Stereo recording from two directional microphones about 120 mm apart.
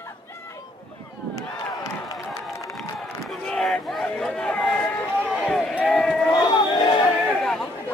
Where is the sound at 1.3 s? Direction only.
30° left (ahead or behind).